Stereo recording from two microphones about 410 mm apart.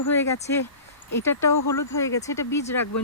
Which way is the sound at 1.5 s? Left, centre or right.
Left.